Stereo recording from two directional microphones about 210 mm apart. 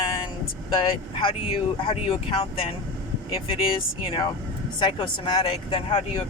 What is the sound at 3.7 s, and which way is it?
Speech, 25° left (ahead or behind).